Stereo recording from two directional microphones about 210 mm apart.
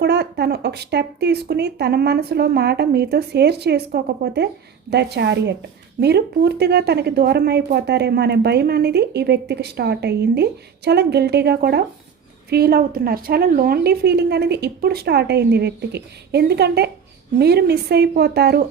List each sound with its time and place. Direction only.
0.0 s a woman's voice: 50° right (ahead or behind)